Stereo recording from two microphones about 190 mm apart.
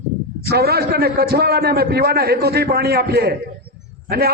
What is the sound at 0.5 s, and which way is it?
A man's voice, 55° right (ahead or behind).